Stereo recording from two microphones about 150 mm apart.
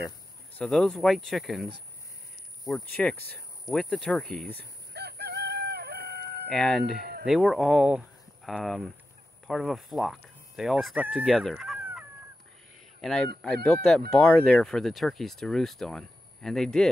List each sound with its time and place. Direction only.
0.6 s speech: 5° left (ahead or behind)
4.6 s chicken: 90° right
6.5 s speech: 5° left (ahead or behind)
11.3 s fowl: centre (ahead or behind)
13.0 s speech: centre (ahead or behind)